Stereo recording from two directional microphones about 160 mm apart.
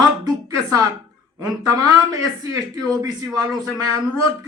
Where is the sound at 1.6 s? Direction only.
20° right (ahead or behind).